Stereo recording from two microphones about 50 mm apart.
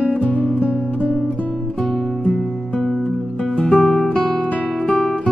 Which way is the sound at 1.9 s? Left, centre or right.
Centre.